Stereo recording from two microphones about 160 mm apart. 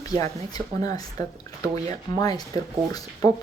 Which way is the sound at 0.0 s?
25° left (ahead or behind).